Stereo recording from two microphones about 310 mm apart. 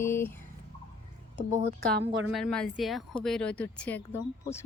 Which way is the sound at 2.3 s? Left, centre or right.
Centre.